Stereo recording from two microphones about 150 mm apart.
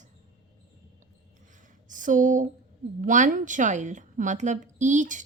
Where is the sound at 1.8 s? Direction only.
60° right (ahead or behind).